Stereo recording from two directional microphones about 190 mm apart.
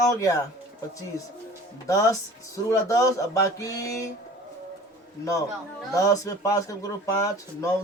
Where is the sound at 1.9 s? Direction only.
15° left (ahead or behind).